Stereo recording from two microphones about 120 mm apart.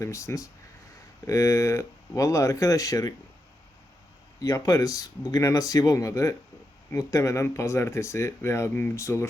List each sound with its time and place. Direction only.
0.0 s speech: 25° left (ahead or behind)
4.4 s speech: 30° left (ahead or behind)